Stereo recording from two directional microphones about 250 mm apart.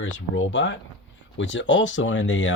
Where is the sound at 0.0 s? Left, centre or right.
Left.